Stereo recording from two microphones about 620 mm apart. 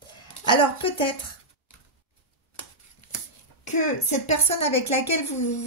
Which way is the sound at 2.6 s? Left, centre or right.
Left.